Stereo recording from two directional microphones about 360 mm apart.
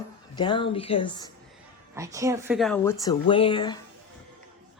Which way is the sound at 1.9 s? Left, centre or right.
Centre.